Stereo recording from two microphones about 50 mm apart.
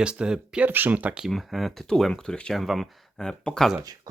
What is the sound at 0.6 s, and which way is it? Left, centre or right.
Speech, right.